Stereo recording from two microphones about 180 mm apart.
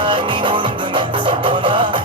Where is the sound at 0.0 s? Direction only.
25° right (ahead or behind).